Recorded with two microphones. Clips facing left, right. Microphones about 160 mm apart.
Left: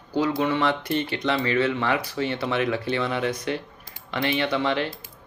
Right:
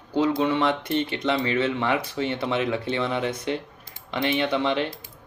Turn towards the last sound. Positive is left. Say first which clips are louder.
# even
turn(degrees=-20)  # may be behind; listen again after turning